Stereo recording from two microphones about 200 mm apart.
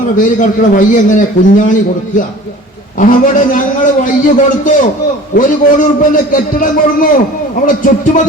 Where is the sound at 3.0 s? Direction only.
45° left (ahead or behind).